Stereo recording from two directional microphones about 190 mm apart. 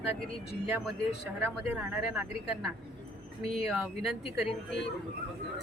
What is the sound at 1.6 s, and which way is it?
A woman's voice, 10° right (ahead or behind).